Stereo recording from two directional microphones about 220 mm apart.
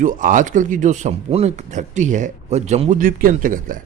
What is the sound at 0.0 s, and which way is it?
Speech, 35° right (ahead or behind).